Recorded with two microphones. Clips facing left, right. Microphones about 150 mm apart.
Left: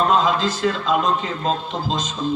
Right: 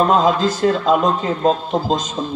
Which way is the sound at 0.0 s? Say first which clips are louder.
Right 3 dB; 45° right (ahead or behind).